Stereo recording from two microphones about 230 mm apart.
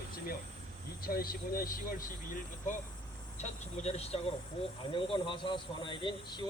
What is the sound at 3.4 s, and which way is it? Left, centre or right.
Speech, left.